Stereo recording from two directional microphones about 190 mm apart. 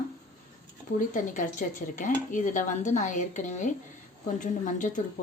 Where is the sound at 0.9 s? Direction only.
40° left (ahead or behind).